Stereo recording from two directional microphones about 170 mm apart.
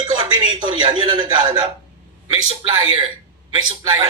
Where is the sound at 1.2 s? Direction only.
25° right (ahead or behind).